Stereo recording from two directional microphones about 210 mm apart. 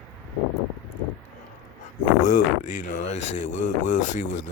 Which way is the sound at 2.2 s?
35° left (ahead or behind).